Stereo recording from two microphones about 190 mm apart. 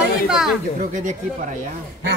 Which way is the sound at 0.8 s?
40° right (ahead or behind).